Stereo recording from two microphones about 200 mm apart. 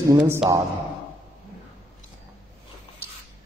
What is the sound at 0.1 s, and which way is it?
Speech, 10° right (ahead or behind).